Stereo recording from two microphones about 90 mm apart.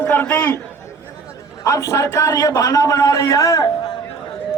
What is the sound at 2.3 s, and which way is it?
A man's voice, 40° left (ahead or behind).